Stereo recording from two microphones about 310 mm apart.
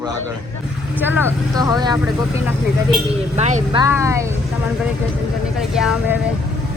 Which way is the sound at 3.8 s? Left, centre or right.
Centre.